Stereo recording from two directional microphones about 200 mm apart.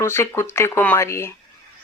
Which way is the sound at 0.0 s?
10° left (ahead or behind).